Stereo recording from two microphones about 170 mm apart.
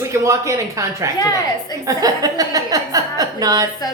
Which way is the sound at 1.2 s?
20° left (ahead or behind).